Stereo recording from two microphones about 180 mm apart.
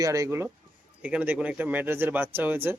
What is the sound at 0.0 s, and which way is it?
Speech, 15° right (ahead or behind).